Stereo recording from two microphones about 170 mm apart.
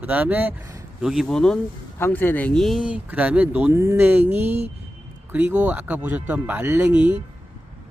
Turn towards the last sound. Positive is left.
turn(degrees=-10)  # may be behind; listen again after turning